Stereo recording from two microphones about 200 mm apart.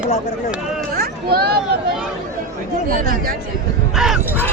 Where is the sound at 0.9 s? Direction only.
50° right (ahead or behind).